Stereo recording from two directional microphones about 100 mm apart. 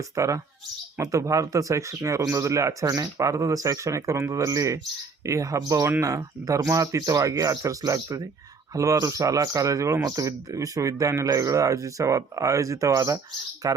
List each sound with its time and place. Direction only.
0.2 s speech: 30° right (ahead or behind)